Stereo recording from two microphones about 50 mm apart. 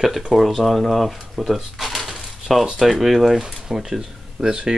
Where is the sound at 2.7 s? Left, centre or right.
Centre.